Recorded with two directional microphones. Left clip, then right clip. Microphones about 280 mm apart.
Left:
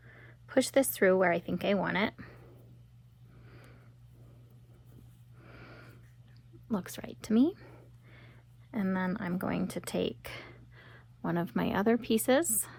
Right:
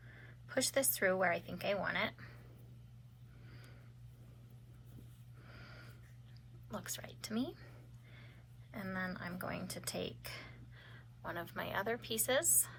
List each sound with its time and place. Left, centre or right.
0.4 s speech: left
5.5 s a sound: left
6.7 s speech: left
8.7 s speech: left